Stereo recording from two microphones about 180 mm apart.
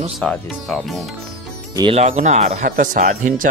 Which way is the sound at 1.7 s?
30° right (ahead or behind).